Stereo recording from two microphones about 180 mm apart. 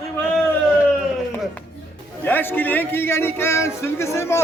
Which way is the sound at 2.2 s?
10° left (ahead or behind).